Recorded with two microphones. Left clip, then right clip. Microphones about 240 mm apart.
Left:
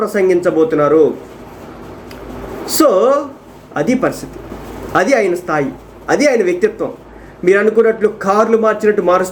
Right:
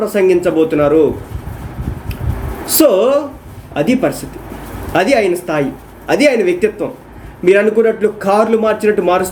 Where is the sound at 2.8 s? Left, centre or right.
Right.